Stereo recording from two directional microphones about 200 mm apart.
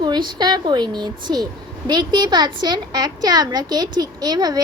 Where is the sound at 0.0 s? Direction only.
20° right (ahead or behind).